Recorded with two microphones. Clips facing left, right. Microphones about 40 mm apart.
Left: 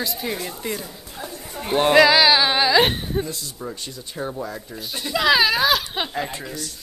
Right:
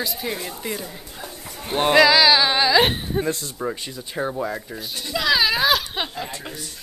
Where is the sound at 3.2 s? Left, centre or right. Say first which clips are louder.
Right 6 dB; right.